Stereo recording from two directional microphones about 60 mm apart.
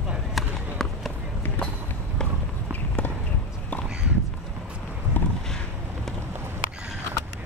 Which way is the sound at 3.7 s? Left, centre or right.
Left.